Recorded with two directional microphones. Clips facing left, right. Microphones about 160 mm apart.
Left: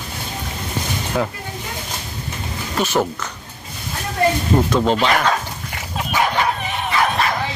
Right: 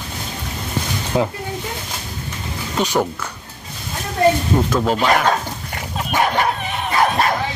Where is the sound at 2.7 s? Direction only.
15° right (ahead or behind).